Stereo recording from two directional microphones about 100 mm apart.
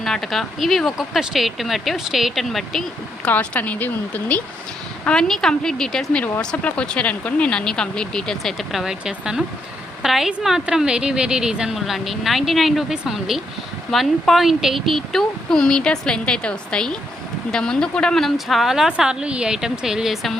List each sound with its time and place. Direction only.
0.0 s a woman's voice: 5° left (ahead or behind)
3.2 s speech: 15° left (ahead or behind)
5.0 s a woman's voice: 5° left (ahead or behind)